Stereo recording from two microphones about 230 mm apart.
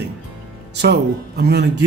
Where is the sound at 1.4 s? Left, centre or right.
Right.